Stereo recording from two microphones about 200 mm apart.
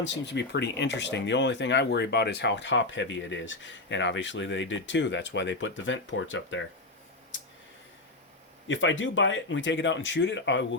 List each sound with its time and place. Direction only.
0.0 s speech: 60° left (ahead or behind)
8.6 s speech: 70° left (ahead or behind)